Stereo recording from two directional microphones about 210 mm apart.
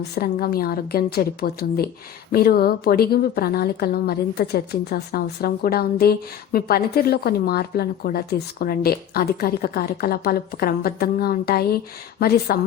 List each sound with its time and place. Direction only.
0.2 s a woman's voice: 45° left (ahead or behind)